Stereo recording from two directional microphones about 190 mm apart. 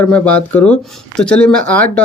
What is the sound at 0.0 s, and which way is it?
Speech, 5° left (ahead or behind).